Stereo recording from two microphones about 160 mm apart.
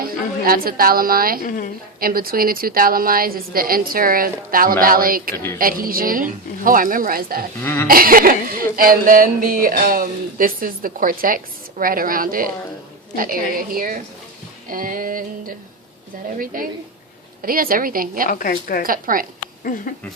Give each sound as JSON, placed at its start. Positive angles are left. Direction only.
{"t": 0.0, "sound": "a woman's voice", "side_deg": -65}
{"t": 1.5, "sound": "a woman's voice", "side_deg": 55}
{"t": 2.0, "sound": "speech", "side_deg": -65}
{"t": 7.6, "sound": "speech", "side_deg": 15}
{"t": 7.9, "sound": "speech", "side_deg": -65}
{"t": 18.3, "sound": "a woman's voice", "side_deg": 60}
{"t": 18.8, "sound": "speech", "side_deg": -60}